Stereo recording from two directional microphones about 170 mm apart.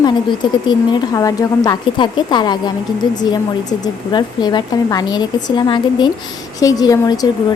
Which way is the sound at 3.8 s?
25° left (ahead or behind).